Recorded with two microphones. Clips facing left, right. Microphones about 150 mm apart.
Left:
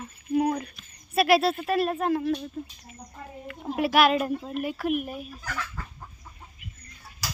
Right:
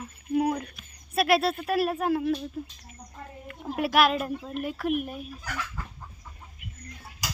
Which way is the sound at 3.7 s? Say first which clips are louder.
Left 2 dB; centre (ahead or behind).